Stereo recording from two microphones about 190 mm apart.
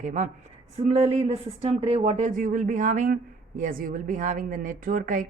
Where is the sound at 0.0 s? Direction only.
40° right (ahead or behind).